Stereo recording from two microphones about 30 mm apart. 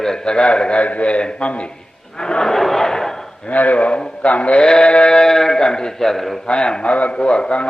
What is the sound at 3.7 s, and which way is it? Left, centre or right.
Speech, left.